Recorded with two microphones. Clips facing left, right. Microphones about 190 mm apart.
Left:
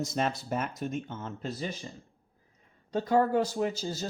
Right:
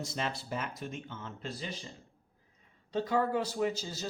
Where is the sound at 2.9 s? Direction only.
45° left (ahead or behind).